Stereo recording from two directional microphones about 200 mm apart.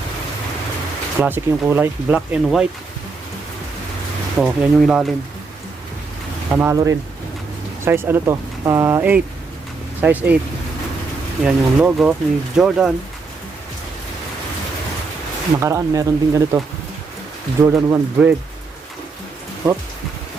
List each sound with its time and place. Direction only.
1.2 s speech: 10° right (ahead or behind)
4.4 s speech: 5° right (ahead or behind)
6.5 s speech: 10° right (ahead or behind)
7.9 s speech: 10° right (ahead or behind)
11.4 s speech: 5° right (ahead or behind)
15.6 s speech: 15° right (ahead or behind)
17.6 s speech: 15° right (ahead or behind)
19.6 s speech: 15° right (ahead or behind)